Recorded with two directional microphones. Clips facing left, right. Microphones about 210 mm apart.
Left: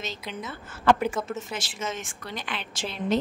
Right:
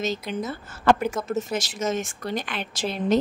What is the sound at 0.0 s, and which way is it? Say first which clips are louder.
A woman's voice: right 8 dB; 45° right (ahead or behind).